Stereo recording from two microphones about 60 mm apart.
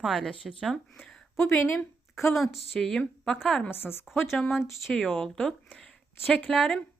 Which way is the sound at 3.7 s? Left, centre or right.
Left.